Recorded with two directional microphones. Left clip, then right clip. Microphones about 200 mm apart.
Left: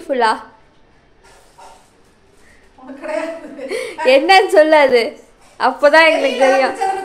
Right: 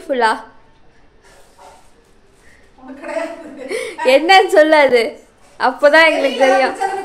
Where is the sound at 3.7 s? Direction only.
5° right (ahead or behind).